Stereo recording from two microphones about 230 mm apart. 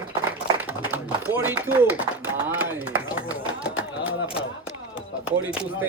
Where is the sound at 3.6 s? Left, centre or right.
Left.